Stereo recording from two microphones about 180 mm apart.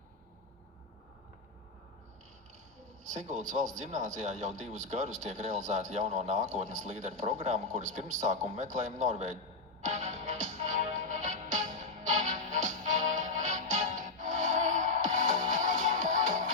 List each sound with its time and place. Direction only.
3.0 s a man's voice: 40° right (ahead or behind)
9.8 s music: 40° right (ahead or behind)